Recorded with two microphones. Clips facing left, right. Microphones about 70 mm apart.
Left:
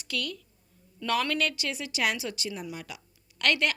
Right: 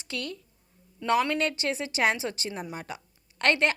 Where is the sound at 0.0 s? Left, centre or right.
Right.